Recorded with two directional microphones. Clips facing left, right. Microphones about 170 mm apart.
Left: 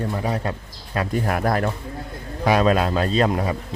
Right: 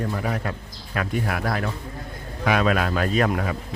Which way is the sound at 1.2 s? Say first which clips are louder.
Left 4 dB; 45° left (ahead or behind).